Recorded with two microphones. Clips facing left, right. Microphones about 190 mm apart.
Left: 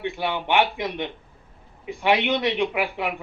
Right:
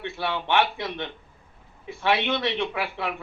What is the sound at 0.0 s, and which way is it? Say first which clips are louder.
A man's voice: left 3 dB; 15° left (ahead or behind).